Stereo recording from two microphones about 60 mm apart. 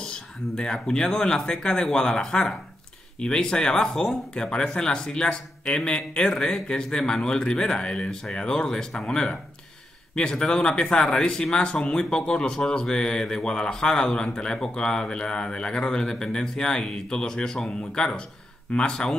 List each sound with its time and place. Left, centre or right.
0.0 s speech: centre